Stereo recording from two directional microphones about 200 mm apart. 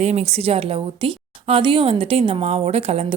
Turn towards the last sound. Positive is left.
turn(degrees=-30)  # may be behind; listen again after turning